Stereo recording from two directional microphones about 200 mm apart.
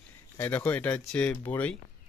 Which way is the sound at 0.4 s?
10° left (ahead or behind).